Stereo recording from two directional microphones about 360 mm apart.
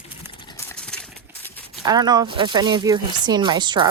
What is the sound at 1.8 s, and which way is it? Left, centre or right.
Speech, centre.